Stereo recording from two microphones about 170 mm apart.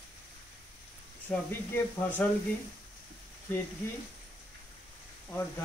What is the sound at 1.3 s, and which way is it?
Speech, 10° left (ahead or behind).